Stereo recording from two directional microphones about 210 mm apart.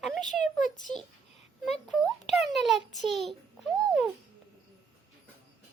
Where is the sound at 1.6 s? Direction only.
Centre (ahead or behind).